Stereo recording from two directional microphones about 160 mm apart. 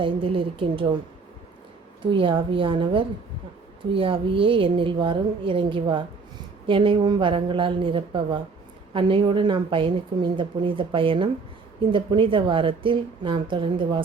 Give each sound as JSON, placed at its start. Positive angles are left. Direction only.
{"t": 0.0, "sound": "a woman's voice", "side_deg": -35}
{"t": 2.0, "sound": "a woman's voice", "side_deg": -30}